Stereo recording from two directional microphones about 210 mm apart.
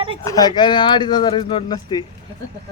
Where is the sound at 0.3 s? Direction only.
20° left (ahead or behind).